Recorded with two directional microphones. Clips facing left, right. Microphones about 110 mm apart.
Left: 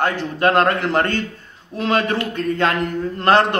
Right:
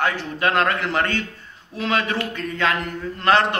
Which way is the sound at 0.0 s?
45° left (ahead or behind).